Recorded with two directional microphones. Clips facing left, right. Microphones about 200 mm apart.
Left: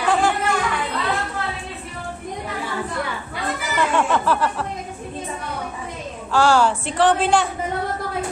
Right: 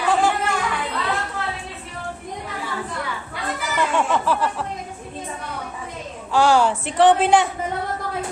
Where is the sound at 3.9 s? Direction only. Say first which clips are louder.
Left 1 dB; 10° right (ahead or behind).